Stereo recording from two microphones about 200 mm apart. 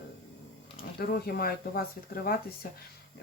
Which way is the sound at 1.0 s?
50° left (ahead or behind).